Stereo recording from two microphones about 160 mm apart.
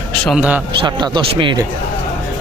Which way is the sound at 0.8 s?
30° right (ahead or behind).